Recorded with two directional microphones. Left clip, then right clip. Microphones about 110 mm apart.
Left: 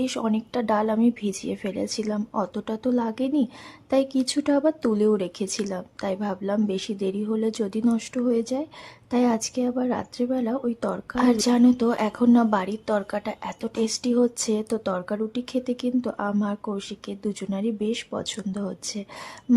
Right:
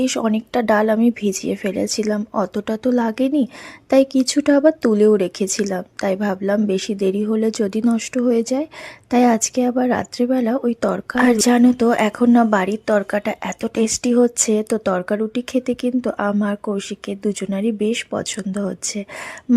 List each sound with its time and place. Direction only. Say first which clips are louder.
0.0 s speech: right 7 dB; 35° right (ahead or behind)